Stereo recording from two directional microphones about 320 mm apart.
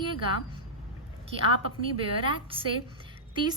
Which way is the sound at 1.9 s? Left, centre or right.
Centre.